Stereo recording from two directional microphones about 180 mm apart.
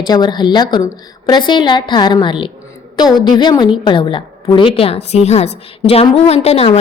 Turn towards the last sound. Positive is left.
turn(degrees=35)  # may be behind; listen again after turning